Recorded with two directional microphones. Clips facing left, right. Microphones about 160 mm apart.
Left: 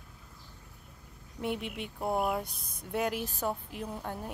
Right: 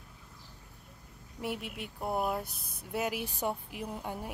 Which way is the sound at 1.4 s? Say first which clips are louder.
Left 3 dB; 5° right (ahead or behind).